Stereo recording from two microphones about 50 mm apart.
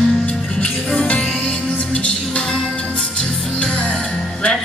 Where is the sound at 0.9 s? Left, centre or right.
Left.